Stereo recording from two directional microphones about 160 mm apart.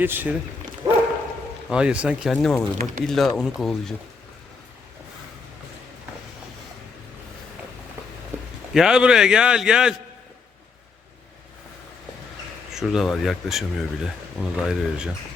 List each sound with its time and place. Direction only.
0.0 s speech: 10° right (ahead or behind)
0.8 s dog: 25° right (ahead or behind)
1.7 s speech: 5° right (ahead or behind)
8.7 s speech: 5° right (ahead or behind)
12.7 s speech: centre (ahead or behind)